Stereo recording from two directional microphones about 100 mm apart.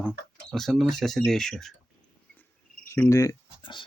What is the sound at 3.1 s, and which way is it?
Speech, 35° left (ahead or behind).